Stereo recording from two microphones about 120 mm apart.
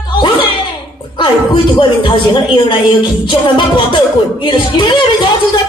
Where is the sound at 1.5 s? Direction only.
45° left (ahead or behind).